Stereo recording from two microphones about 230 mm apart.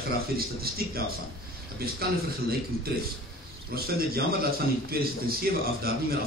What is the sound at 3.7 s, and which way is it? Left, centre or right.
A man's voice, right.